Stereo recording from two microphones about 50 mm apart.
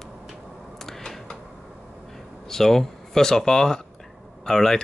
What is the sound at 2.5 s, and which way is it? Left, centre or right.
Speech, centre.